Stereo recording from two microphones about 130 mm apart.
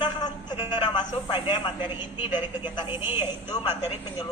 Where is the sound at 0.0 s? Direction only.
35° left (ahead or behind).